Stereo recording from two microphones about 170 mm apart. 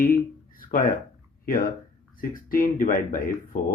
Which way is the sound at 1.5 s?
55° left (ahead or behind).